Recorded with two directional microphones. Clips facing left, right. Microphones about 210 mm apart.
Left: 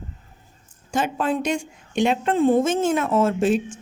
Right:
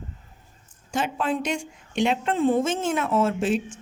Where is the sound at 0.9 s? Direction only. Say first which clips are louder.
Left 3 dB; 45° left (ahead or behind).